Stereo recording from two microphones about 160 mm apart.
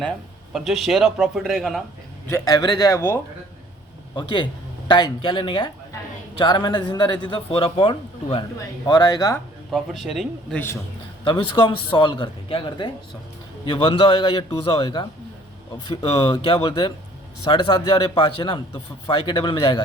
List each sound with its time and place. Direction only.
0.0 s speech: centre (ahead or behind)
2.3 s speech: 20° left (ahead or behind)
4.1 s speech: 30° left (ahead or behind)
9.7 s speech: centre (ahead or behind)
11.2 s a man's voice: 30° left (ahead or behind)